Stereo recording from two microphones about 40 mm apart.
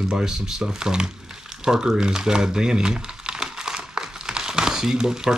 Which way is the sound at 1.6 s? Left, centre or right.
Centre.